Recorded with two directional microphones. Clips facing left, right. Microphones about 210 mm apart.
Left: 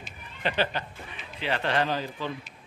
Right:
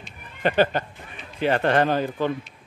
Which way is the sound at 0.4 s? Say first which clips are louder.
Right 8 dB; 50° right (ahead or behind).